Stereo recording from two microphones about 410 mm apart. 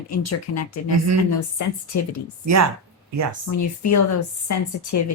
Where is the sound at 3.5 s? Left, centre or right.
Left.